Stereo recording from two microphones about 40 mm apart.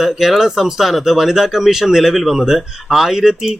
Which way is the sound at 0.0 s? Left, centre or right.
Centre.